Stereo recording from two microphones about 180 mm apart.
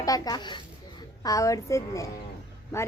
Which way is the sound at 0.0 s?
20° left (ahead or behind).